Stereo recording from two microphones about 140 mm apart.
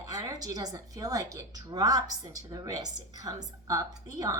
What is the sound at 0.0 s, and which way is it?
A woman's voice, 25° right (ahead or behind).